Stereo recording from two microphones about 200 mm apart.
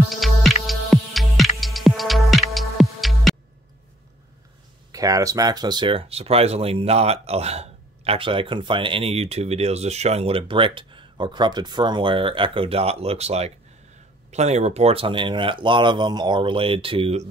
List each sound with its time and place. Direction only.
0.1 s music: centre (ahead or behind)
4.9 s speech: 15° right (ahead or behind)